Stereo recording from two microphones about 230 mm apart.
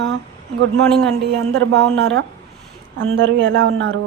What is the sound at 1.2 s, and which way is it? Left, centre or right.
Speech, right.